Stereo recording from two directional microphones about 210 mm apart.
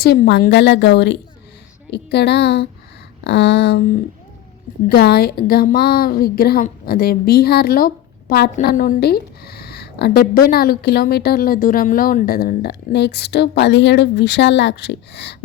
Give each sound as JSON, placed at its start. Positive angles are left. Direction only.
{"t": 0.0, "sound": "a woman's voice", "side_deg": 50}
{"t": 3.2, "sound": "a sound", "side_deg": 55}
{"t": 4.9, "sound": "a woman's voice", "side_deg": 50}